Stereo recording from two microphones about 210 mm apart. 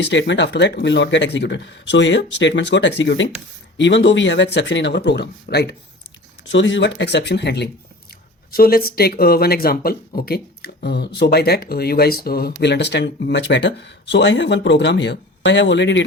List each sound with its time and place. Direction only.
0.0 s speech: 60° left (ahead or behind)